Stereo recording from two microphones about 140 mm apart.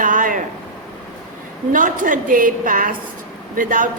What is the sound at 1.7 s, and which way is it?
Speech, 75° right (ahead or behind).